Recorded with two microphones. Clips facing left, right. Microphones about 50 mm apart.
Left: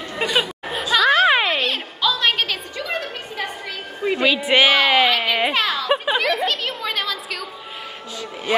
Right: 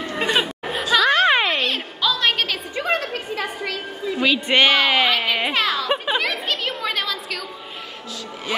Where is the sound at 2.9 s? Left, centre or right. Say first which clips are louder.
Right 5 dB; right.